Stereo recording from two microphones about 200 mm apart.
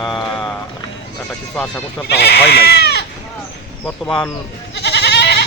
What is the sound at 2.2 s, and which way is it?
Speech, 55° left (ahead or behind).